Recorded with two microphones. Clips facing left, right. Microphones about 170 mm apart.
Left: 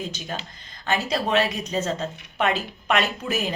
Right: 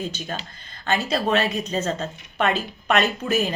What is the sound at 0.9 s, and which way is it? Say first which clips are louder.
A woman's voice: right 2 dB; 15° left (ahead or behind).